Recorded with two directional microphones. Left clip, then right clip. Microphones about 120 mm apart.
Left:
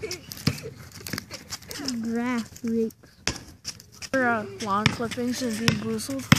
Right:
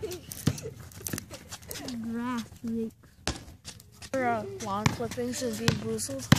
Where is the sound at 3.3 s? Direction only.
15° left (ahead or behind).